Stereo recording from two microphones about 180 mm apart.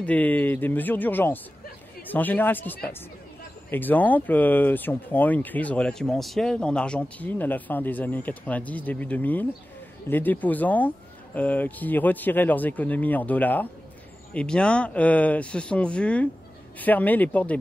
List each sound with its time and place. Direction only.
0.0 s speech: 10° left (ahead or behind)